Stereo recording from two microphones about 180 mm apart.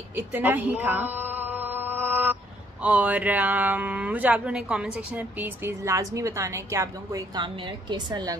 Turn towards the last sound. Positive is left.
turn(degrees=-15)  # may be behind; listen again after turning